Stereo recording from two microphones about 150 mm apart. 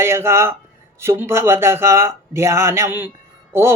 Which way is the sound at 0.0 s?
15° right (ahead or behind).